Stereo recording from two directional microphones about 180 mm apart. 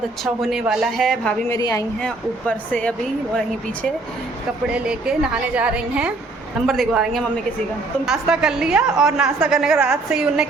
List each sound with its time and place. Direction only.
0.4 s a woman's voice: centre (ahead or behind)
1.5 s a woman's voice: 20° left (ahead or behind)
2.0 s speech: 5° left (ahead or behind)
4.7 s a woman's voice: 5° right (ahead or behind)